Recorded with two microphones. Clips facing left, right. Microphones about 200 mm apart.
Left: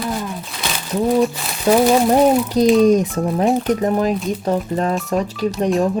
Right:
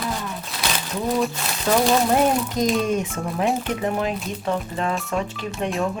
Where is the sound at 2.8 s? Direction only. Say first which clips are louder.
Left 9 dB; 35° left (ahead or behind).